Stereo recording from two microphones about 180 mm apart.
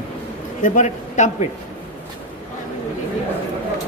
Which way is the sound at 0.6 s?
45° left (ahead or behind).